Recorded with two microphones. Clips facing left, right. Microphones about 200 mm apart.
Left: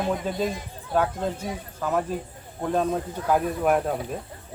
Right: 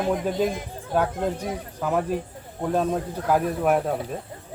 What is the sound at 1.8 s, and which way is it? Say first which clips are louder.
A man's voice: right 2 dB; 15° right (ahead or behind).